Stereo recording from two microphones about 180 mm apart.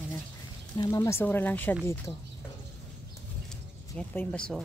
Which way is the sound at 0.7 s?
20° left (ahead or behind).